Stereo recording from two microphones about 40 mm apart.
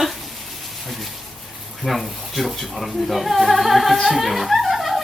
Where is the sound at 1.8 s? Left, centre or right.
Centre.